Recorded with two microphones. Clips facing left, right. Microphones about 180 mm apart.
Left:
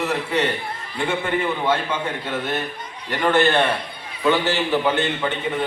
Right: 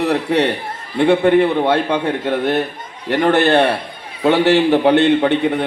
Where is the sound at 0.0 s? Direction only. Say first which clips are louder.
Right 6 dB; 65° right (ahead or behind).